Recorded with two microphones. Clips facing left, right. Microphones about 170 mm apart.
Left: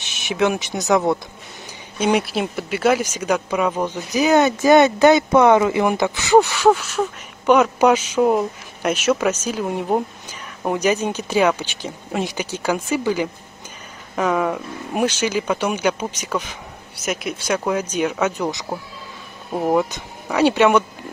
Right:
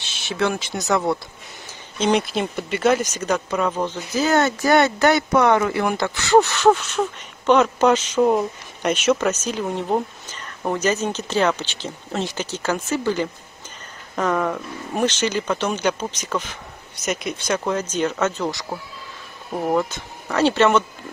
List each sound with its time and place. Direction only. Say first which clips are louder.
0.0 s speech: left 3 dB; 15° left (ahead or behind)